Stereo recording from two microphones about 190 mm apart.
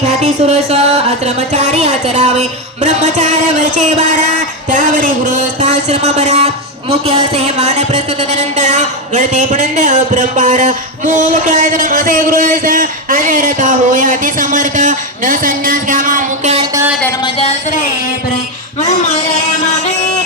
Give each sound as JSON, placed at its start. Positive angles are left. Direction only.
{"t": 0.0, "sound": "music", "side_deg": -35}
{"t": 7.3, "sound": "a woman's voice", "side_deg": -35}
{"t": 17.2, "sound": "speech", "side_deg": 30}